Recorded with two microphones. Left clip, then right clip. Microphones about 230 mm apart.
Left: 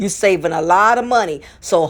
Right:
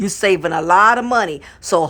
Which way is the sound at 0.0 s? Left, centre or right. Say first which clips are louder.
Left 1 dB; right.